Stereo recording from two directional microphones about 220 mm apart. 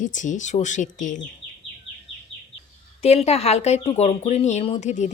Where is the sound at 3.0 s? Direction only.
25° left (ahead or behind).